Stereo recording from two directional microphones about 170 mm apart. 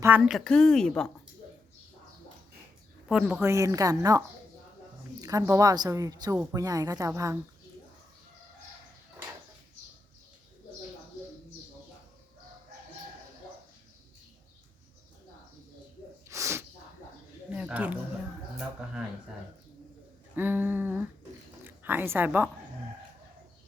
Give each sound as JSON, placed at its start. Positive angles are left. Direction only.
{"t": 0.0, "sound": "speech", "side_deg": -5}
{"t": 3.1, "sound": "speech", "side_deg": -5}
{"t": 3.4, "sound": "a woman's voice", "side_deg": -15}
{"t": 5.2, "sound": "a woman's voice", "side_deg": -20}
{"t": 16.3, "sound": "snort", "side_deg": -15}
{"t": 17.5, "sound": "a sound", "side_deg": -5}
{"t": 20.3, "sound": "a sound", "side_deg": -10}
{"t": 21.6, "sound": "speech", "side_deg": -10}